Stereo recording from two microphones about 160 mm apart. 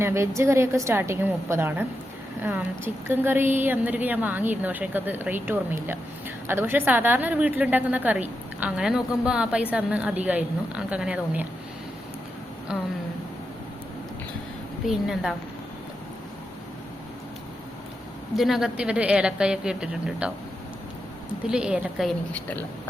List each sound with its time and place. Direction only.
0.0 s a woman's voice: 15° right (ahead or behind)
14.8 s a woman's voice: 5° right (ahead or behind)
18.3 s a woman's voice: centre (ahead or behind)
21.4 s a woman's voice: 5° right (ahead or behind)
22.3 s speech: 10° left (ahead or behind)